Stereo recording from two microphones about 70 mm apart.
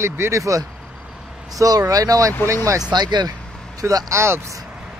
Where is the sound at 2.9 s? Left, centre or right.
Right.